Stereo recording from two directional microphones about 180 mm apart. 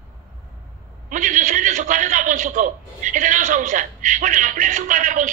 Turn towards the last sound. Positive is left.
turn(degrees=-45)  # may be behind; listen again after turning